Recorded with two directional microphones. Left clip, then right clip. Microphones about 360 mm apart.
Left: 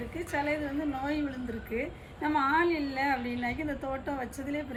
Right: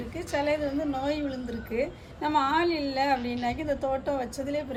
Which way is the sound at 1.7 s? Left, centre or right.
Centre.